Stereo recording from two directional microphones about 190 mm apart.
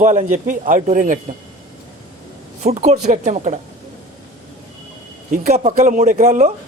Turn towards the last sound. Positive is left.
turn(degrees=-40)  # may be behind; listen again after turning